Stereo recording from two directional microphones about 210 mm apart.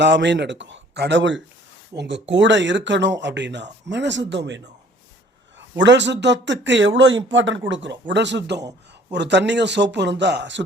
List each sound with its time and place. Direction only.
0.0 s speech: 55° right (ahead or behind)